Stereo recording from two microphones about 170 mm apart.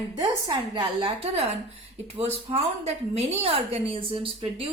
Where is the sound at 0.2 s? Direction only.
25° right (ahead or behind).